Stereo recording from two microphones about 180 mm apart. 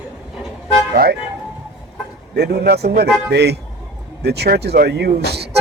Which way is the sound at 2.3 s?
65° right (ahead or behind).